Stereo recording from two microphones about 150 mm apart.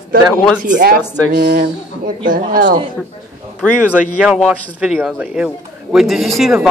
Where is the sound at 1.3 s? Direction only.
90° right.